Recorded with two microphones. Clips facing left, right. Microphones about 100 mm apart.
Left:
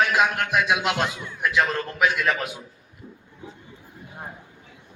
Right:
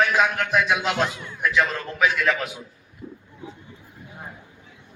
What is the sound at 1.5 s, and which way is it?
Speech, 25° left (ahead or behind).